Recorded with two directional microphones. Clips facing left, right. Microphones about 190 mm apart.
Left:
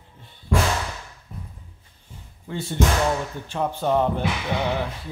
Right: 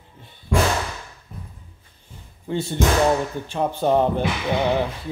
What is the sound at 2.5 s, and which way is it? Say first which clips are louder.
Music: right 2 dB; 20° right (ahead or behind).